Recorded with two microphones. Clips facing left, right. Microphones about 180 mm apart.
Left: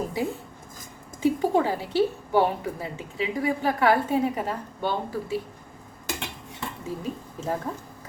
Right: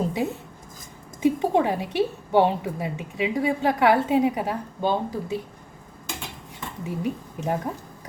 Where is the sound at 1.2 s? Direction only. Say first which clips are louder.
Right 1 dB; 20° right (ahead or behind).